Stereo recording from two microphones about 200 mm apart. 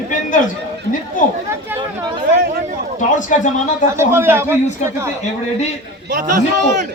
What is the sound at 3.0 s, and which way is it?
Speech, 40° left (ahead or behind).